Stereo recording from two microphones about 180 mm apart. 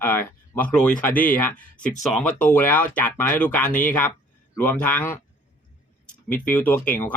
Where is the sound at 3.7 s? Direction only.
45° left (ahead or behind).